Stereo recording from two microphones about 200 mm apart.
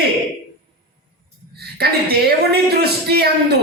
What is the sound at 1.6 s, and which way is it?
A man's voice, 50° right (ahead or behind).